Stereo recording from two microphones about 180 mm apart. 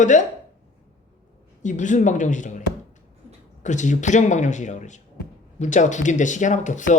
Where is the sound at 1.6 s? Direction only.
45° left (ahead or behind).